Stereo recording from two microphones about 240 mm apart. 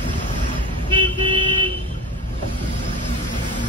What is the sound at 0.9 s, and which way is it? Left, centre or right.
Vehicle, centre.